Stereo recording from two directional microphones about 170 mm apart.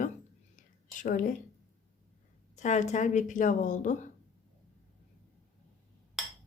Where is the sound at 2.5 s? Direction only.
45° left (ahead or behind).